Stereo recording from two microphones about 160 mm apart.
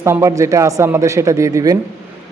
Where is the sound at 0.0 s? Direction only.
15° right (ahead or behind).